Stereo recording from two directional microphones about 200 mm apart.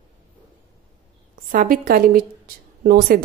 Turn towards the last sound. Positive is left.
turn(degrees=-50)  # may be behind; listen again after turning